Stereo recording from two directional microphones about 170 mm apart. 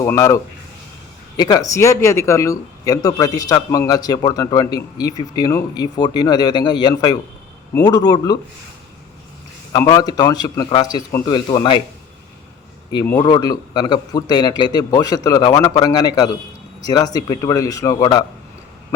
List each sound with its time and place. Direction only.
0.0 s speech: 15° left (ahead or behind)
1.4 s speech: 20° left (ahead or behind)
9.7 s speech: 20° left (ahead or behind)
13.1 s speech: 25° left (ahead or behind)